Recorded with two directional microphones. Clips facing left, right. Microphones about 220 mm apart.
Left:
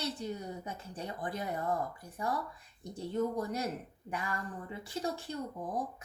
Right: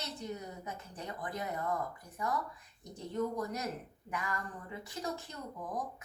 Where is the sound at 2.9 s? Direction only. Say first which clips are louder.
Left 2 dB; 30° left (ahead or behind).